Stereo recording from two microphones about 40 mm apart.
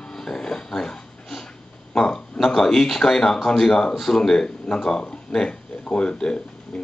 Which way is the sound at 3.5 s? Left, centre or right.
Centre.